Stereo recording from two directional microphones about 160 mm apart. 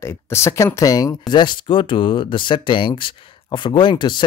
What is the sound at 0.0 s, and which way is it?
Speech, 15° left (ahead or behind).